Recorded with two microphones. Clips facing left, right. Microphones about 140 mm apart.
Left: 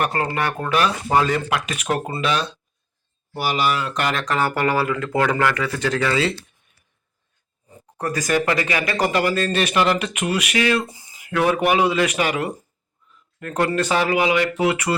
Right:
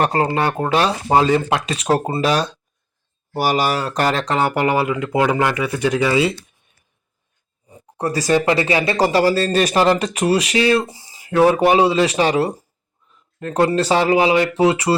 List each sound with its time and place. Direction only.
0.0 s speech: 25° right (ahead or behind)
7.9 s speech: 30° right (ahead or behind)